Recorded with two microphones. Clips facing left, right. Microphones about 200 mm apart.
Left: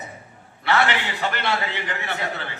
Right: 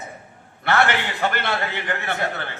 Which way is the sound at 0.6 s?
50° right (ahead or behind).